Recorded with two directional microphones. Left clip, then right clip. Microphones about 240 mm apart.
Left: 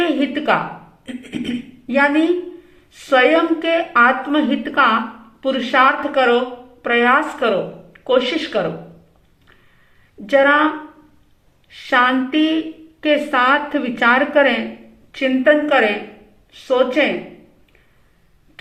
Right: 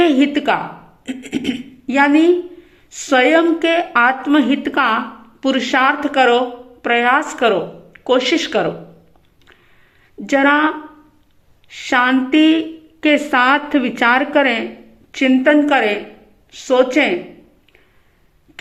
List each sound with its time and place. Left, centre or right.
0.0 s a woman's voice: right
10.2 s a woman's voice: right
11.7 s a woman's voice: right